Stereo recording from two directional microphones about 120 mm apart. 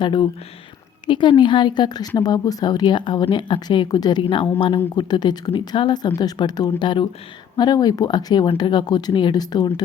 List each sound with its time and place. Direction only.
0.0 s a woman's voice: 40° left (ahead or behind)